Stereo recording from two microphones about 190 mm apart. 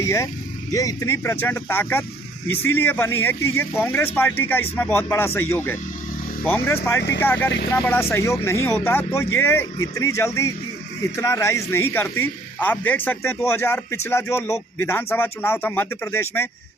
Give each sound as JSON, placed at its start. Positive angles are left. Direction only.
{"t": 0.0, "sound": "speech", "side_deg": 15}